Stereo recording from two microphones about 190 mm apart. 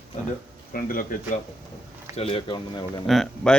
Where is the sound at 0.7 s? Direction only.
50° left (ahead or behind).